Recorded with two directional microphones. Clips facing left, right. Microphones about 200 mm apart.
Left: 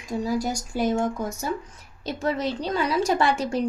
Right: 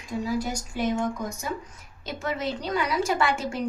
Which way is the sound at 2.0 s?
35° left (ahead or behind).